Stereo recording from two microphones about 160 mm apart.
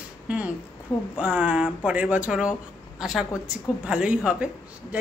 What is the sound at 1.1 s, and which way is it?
A woman's voice, 5° right (ahead or behind).